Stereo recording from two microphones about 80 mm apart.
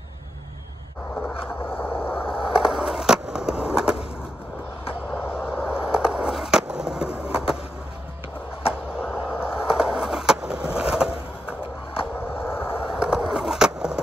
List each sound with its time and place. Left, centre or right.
1.6 s vehicle: left
2.5 s skateboard: centre
5.3 s skateboard: centre
8.9 s a sound: centre
9.4 s skateboard: centre
12.4 s vehicle: left
12.8 s skateboard: centre